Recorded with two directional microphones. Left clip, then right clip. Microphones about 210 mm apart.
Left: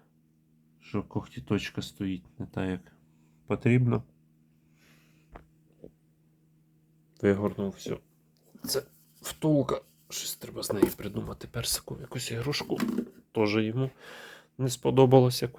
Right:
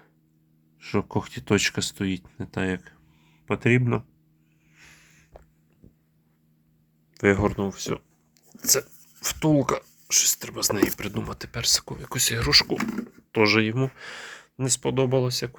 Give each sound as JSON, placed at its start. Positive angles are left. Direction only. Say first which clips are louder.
{"t": 0.8, "sound": "speech", "louder": "right 8 dB", "side_deg": -30}
{"t": 2.4, "sound": "speech", "louder": "right 6 dB", "side_deg": -10}
{"t": 7.1, "sound": "a sound", "louder": "right 5 dB", "side_deg": -10}
{"t": 7.4, "sound": "speech", "louder": "right 6 dB", "side_deg": -30}
{"t": 8.5, "sound": "a sound", "louder": "right 8 dB", "side_deg": -20}
{"t": 9.2, "sound": "speech", "louder": "right 4 dB", "side_deg": -10}
{"t": 11.9, "sound": "speech", "louder": "right 10 dB", "side_deg": -15}
{"t": 14.9, "sound": "speech", "louder": "left 5 dB", "side_deg": 20}
{"t": 15.3, "sound": "speech", "louder": "right 3 dB", "side_deg": 5}